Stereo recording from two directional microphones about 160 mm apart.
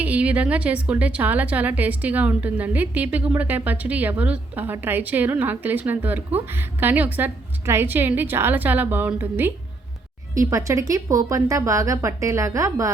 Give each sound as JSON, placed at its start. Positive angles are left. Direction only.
{"t": 0.0, "sound": "a woman's voice", "side_deg": -10}